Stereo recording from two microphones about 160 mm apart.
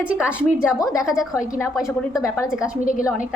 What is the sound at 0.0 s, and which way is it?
Speech, 10° right (ahead or behind).